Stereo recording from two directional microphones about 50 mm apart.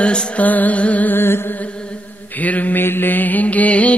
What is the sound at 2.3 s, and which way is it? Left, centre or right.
Mantra, left.